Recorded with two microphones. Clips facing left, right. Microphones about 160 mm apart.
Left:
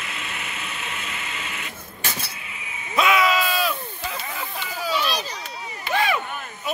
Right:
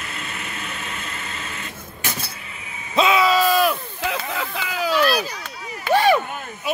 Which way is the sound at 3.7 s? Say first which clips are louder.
Right 5 dB; 85° right.